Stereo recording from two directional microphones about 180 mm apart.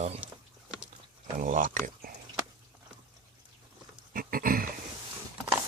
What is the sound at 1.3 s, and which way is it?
Speech, 45° right (ahead or behind).